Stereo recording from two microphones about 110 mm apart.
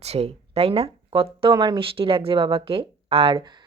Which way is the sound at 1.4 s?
45° right (ahead or behind).